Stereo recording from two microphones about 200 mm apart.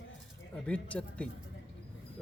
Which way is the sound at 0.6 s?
5° left (ahead or behind).